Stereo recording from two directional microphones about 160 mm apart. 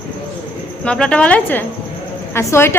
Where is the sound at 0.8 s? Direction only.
5° left (ahead or behind).